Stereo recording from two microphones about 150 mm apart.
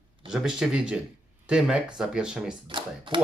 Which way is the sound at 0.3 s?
5° right (ahead or behind).